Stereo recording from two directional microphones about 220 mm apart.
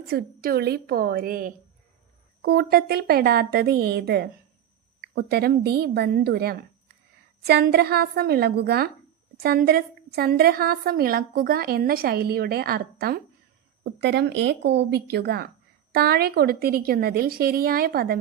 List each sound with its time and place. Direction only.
0.1 s a woman's voice: 45° right (ahead or behind)